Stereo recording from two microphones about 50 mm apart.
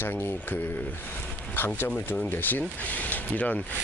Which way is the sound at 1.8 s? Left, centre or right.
Left.